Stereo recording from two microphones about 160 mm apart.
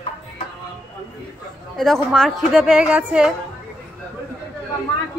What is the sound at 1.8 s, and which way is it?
A woman's voice, 5° left (ahead or behind).